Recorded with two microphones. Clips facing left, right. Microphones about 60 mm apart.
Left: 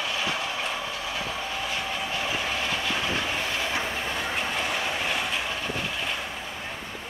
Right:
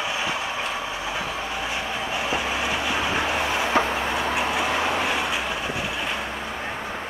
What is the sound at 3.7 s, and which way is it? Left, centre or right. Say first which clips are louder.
Train: right 7 dB; right.